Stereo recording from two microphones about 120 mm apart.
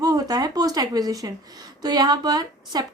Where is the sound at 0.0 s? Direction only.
30° right (ahead or behind).